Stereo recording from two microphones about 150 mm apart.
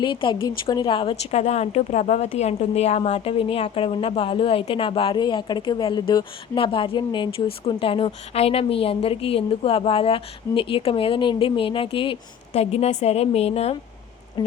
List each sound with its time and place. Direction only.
0.0 s a woman's voice: 30° left (ahead or behind)